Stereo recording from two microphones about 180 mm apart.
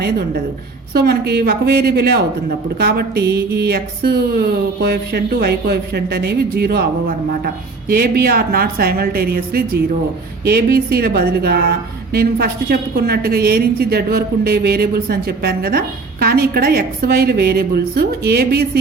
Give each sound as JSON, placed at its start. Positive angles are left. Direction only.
{"t": 0.0, "sound": "speech", "side_deg": -65}